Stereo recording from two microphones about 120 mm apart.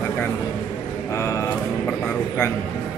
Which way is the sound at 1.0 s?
25° left (ahead or behind).